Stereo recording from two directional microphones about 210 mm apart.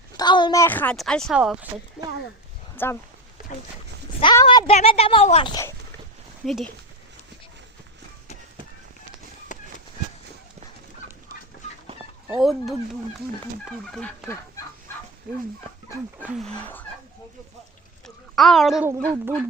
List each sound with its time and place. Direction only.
0.2 s speech: 20° left (ahead or behind); by 1.5 s centre (ahead or behind)
2.7 s speech: 10° left (ahead or behind)
4.2 s speech: 25° left (ahead or behind)
6.4 s speech: centre (ahead or behind)
9.5 s a sound: 35° left (ahead or behind)
12.3 s speech: centre (ahead or behind)
15.3 s speech: 5° right (ahead or behind)
18.0 s a sound: centre (ahead or behind)
18.9 s speech: 15° right (ahead or behind)